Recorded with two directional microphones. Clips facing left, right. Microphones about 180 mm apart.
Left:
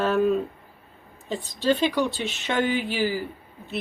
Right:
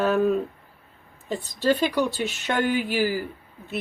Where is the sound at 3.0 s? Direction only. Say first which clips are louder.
Right 1 dB; 15° left (ahead or behind).